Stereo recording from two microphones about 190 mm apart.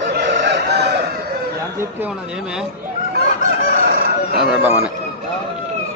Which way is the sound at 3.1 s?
50° right (ahead or behind).